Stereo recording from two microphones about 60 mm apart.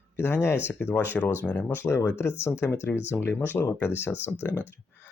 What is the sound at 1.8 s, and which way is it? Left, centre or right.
Speech, left.